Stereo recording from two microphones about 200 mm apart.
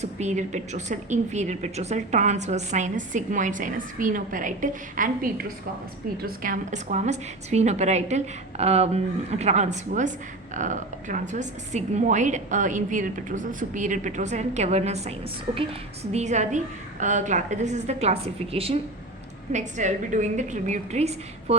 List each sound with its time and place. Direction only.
0.0 s a woman's voice: 35° right (ahead or behind)